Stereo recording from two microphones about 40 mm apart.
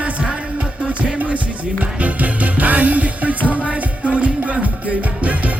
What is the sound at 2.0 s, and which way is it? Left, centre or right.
Music, right.